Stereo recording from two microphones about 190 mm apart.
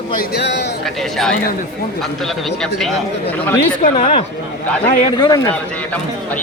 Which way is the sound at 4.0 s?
30° left (ahead or behind).